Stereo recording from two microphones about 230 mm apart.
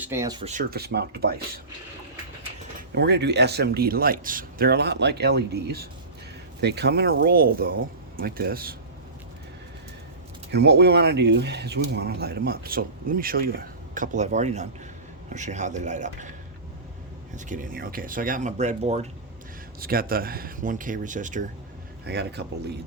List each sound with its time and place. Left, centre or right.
0.0 s speech: centre
0.4 s speech: right
2.9 s speech: right
10.5 s speech: right
17.3 s speech: right
19.8 s speech: right
22.0 s speech: right